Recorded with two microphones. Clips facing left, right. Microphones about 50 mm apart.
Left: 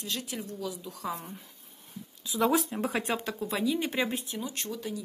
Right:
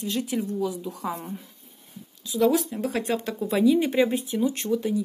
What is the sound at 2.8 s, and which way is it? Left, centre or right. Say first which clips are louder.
Speech: right 4 dB; centre.